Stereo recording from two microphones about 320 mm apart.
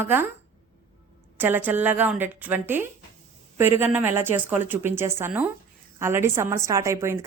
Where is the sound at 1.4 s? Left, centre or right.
Centre.